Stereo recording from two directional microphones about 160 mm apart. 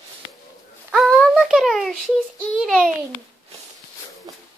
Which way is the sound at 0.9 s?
Centre (ahead or behind).